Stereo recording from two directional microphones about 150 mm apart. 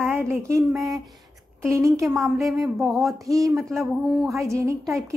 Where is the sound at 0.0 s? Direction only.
15° right (ahead or behind).